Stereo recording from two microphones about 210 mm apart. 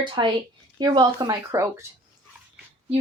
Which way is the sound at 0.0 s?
20° right (ahead or behind).